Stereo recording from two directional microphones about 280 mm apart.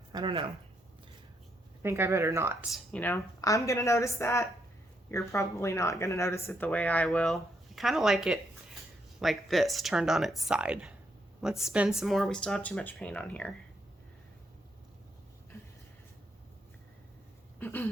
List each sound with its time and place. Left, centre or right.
0.1 s speech: centre
1.8 s speech: centre
17.6 s a sound: centre